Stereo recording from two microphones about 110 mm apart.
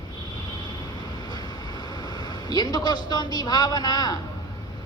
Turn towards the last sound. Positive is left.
turn(degrees=35)  # may be behind; listen again after turning